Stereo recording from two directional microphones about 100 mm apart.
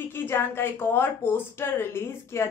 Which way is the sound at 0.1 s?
25° left (ahead or behind).